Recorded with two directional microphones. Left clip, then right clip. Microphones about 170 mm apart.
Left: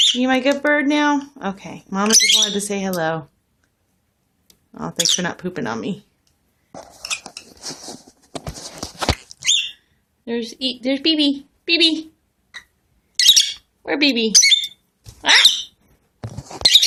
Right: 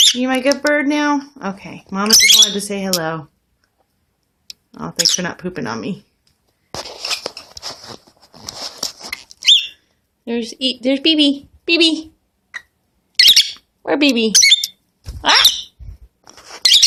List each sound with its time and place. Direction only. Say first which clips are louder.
0.0 s speech: right 2 dB; 10° right (ahead or behind)
4.7 s speech: right 2 dB; centre (ahead or behind)
10.2 s speech: right 3 dB; 20° right (ahead or behind)
12.5 s a sound: right 6 dB; 30° right (ahead or behind)
13.1 s bird: right 3 dB; 10° right (ahead or behind)
13.8 s speech: right 3 dB; 20° right (ahead or behind)
14.3 s bird: right 2 dB; 30° right (ahead or behind)